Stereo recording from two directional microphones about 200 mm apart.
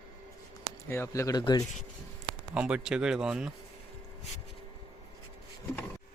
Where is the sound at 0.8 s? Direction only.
15° left (ahead or behind).